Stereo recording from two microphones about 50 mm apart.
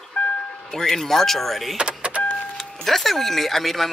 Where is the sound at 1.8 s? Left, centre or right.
Right.